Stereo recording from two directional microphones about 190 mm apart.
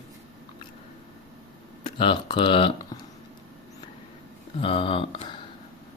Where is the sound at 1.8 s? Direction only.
25° left (ahead or behind).